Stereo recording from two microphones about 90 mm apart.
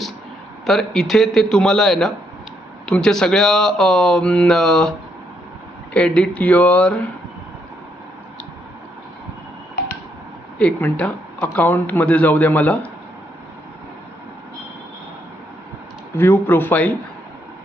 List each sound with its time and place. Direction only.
0.6 s speech: 5° left (ahead or behind)
10.6 s speech: 20° left (ahead or behind)
16.1 s speech: 25° left (ahead or behind)